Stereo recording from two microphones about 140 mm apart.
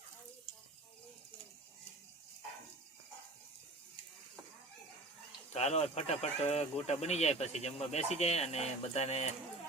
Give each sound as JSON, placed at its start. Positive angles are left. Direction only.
{"t": 5.5, "sound": "speech", "side_deg": 50}